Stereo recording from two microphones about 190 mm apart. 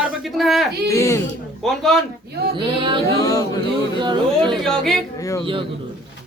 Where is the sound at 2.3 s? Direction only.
55° right (ahead or behind).